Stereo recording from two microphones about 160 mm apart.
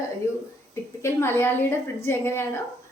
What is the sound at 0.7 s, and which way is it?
A woman's voice, 15° left (ahead or behind).